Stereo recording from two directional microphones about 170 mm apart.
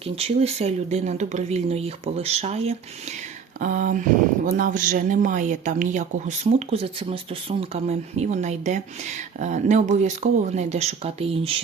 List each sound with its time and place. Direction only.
0.0 s speech: 35° right (ahead or behind)
3.6 s speech: 50° right (ahead or behind); by 11.5 s 35° right (ahead or behind)